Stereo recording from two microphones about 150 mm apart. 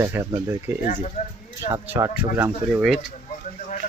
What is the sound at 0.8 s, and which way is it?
Speech, 55° left (ahead or behind).